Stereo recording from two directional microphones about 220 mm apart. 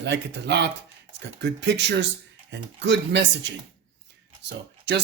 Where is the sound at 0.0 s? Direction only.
50° right (ahead or behind).